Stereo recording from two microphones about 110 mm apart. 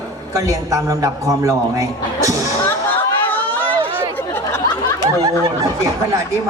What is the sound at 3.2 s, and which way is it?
Chatter, 15° left (ahead or behind).